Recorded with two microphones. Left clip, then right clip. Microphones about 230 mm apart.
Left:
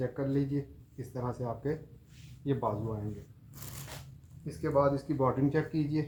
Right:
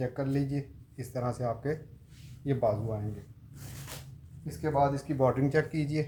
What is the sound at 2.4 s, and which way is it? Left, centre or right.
Speech, right.